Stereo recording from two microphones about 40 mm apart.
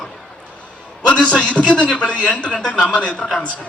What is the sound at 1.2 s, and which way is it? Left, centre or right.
A man's voice, left.